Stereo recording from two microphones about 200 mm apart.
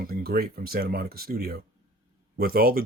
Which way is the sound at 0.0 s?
50° right (ahead or behind).